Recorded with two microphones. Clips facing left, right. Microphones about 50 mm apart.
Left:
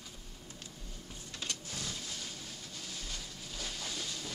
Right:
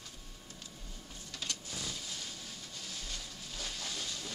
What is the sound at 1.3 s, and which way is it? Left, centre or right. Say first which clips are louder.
Printer: even; centre.